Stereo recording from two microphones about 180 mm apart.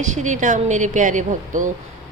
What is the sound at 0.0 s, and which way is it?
A woman's voice, 40° right (ahead or behind).